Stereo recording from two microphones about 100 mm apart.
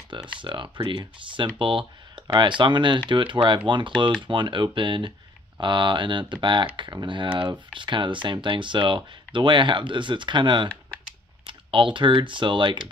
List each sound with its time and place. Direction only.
0.4 s speech: 55° right (ahead or behind)